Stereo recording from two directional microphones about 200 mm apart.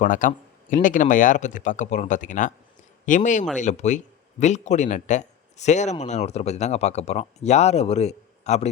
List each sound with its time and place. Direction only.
0.0 s speech: 40° left (ahead or behind)